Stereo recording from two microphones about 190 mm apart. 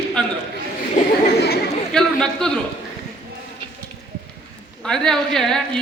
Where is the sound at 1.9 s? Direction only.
5° left (ahead or behind).